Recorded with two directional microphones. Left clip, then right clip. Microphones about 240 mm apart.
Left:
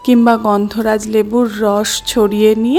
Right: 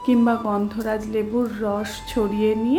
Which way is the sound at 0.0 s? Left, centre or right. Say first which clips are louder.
Left 9 dB; left.